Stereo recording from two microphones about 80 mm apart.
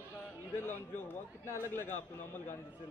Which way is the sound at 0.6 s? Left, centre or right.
Left.